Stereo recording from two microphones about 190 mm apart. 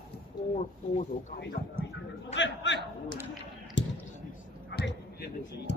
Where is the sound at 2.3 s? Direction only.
70° left (ahead or behind).